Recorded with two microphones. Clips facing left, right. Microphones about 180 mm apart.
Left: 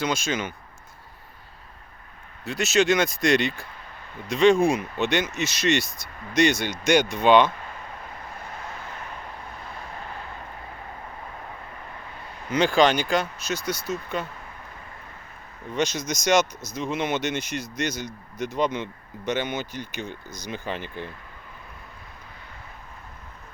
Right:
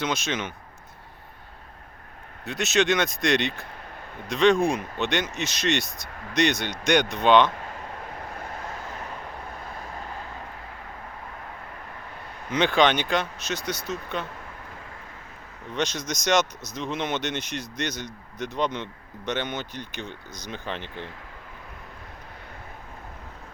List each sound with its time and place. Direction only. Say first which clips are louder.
0.3 s speech: left 2 dB; 10° left (ahead or behind)
2.4 s speech: left 2 dB; centre (ahead or behind)
12.5 s speech: left 1 dB; centre (ahead or behind)
15.7 s speech: left 2 dB; 5° left (ahead or behind)